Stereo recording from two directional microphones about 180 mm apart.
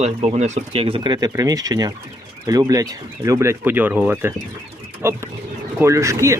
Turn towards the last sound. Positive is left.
turn(degrees=-15)  # may be behind; listen again after turning